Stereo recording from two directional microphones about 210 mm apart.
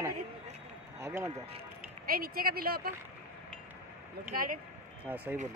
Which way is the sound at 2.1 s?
45° right (ahead or behind).